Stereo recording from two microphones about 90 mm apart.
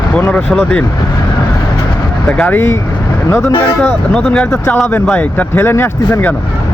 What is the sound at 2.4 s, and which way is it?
Speech, 25° left (ahead or behind).